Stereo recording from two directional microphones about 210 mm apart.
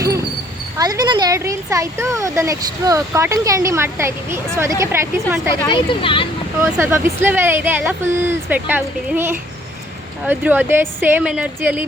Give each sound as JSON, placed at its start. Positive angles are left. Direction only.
{"t": 0.8, "sound": "speech", "side_deg": -20}
{"t": 5.6, "sound": "speech", "side_deg": 25}
{"t": 6.6, "sound": "speech", "side_deg": -10}